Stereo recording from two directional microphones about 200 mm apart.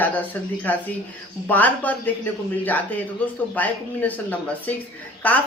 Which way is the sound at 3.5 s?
10° left (ahead or behind).